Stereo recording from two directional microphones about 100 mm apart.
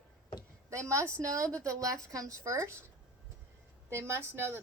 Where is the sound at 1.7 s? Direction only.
35° right (ahead or behind).